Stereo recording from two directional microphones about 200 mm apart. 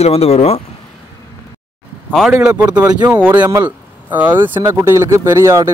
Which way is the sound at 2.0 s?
Centre (ahead or behind).